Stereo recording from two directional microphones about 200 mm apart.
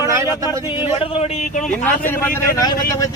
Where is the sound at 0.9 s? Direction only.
30° left (ahead or behind).